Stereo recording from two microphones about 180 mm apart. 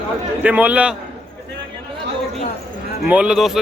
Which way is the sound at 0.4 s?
10° right (ahead or behind).